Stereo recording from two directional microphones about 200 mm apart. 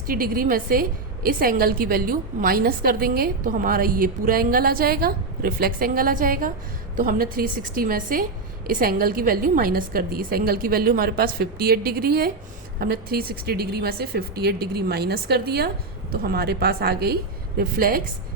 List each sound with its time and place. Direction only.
0.1 s a woman's voice: 45° right (ahead or behind)